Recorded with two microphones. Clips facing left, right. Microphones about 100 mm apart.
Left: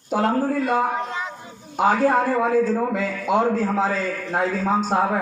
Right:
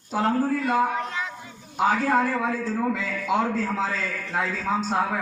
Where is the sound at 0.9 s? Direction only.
25° left (ahead or behind).